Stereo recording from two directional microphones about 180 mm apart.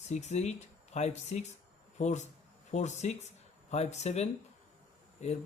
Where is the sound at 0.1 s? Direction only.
40° left (ahead or behind).